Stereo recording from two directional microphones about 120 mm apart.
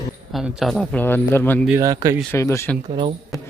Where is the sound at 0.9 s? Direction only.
15° left (ahead or behind).